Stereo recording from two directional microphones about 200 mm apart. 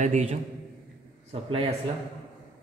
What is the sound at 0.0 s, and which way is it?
Speech, 35° right (ahead or behind).